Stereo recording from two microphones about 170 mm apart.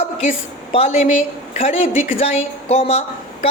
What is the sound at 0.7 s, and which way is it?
Speech, 35° left (ahead or behind).